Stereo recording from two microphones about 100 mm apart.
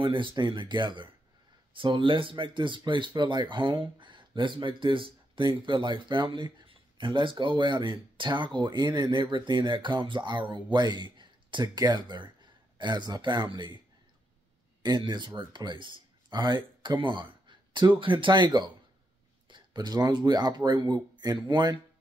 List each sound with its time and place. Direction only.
0.0 s speech: 60° right (ahead or behind)
14.8 s speech: 45° right (ahead or behind)